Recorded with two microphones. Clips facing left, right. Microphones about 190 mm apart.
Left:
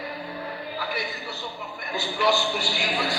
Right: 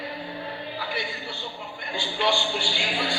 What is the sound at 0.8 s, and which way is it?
Music, 30° right (ahead or behind).